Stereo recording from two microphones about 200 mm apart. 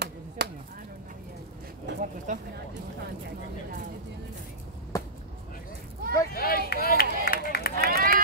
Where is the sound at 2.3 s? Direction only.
40° right (ahead or behind).